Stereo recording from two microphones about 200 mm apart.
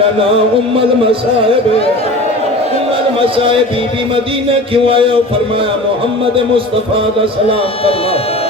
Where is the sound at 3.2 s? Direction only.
25° right (ahead or behind).